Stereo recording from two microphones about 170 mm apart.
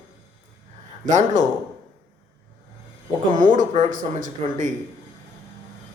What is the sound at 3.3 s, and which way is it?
Speech, 50° right (ahead or behind).